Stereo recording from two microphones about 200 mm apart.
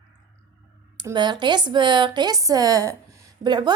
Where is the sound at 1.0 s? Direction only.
20° right (ahead or behind).